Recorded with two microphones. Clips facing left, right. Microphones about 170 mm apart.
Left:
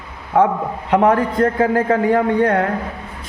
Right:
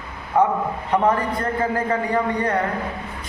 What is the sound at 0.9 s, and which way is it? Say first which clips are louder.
A man's voice: left 5 dB; 70° left (ahead or behind).